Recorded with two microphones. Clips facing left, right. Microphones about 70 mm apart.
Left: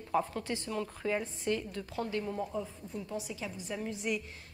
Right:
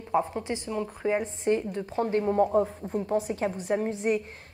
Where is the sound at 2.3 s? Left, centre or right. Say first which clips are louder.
Right 13 dB; right.